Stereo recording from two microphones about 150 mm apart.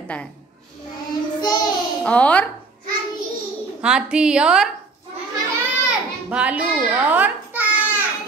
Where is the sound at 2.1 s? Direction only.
10° left (ahead or behind).